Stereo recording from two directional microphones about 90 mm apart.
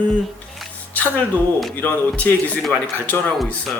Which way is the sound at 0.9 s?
15° left (ahead or behind).